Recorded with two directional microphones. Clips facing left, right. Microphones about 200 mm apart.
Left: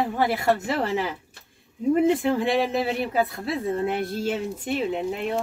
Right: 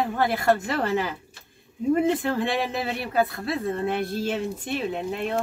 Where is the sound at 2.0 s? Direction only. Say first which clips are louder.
Left 3 dB; 15° left (ahead or behind).